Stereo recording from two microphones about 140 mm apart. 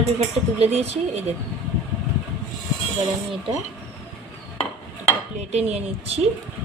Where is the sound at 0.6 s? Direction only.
50° right (ahead or behind).